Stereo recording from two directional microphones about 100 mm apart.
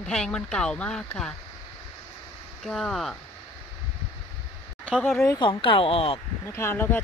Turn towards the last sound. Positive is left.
turn(degrees=20)  # may be behind; listen again after turning